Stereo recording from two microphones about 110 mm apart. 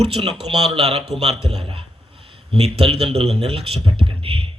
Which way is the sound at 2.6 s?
65° right (ahead or behind).